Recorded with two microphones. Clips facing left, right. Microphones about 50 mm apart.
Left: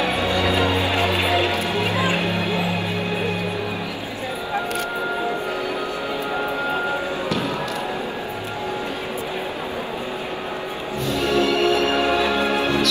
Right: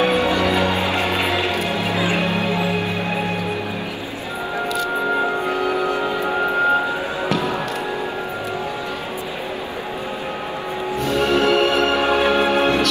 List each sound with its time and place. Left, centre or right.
0.0 s music: right
1.8 s music: left
2.0 s music: right
5.5 s music: right
7.2 s music: right
11.1 s music: right